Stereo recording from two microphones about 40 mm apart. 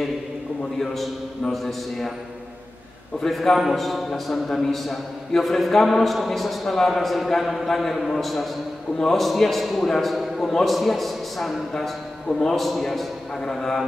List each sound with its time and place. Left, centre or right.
0.7 s a man's voice: centre
3.3 s a man's voice: centre
12.3 s speech: centre
12.5 s a man's voice: centre